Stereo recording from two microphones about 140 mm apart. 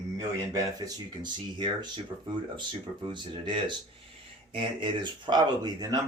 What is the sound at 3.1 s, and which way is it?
Speech, 35° right (ahead or behind).